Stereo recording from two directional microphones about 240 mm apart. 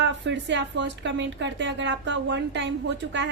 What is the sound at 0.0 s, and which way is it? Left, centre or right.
Speech, right.